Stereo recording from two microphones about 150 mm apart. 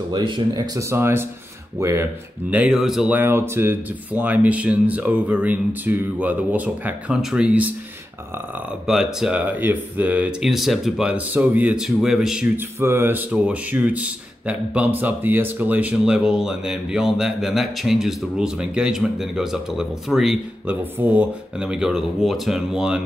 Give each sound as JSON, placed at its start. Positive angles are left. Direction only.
{"t": 0.1, "sound": "speech", "side_deg": -30}
{"t": 0.7, "sound": "speech", "side_deg": -20}
{"t": 2.5, "sound": "speech", "side_deg": -5}
{"t": 8.8, "sound": "speech", "side_deg": -5}
{"t": 12.5, "sound": "speech", "side_deg": -15}